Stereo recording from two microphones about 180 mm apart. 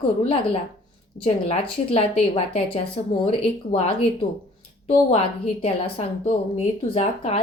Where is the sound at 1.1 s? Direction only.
45° left (ahead or behind).